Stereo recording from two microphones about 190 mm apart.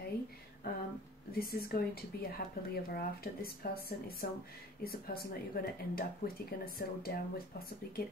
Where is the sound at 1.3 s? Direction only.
55° left (ahead or behind).